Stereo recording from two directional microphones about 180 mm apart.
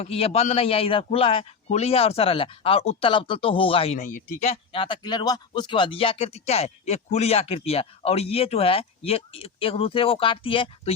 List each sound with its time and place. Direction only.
0.0 s a man's voice: 35° left (ahead or behind)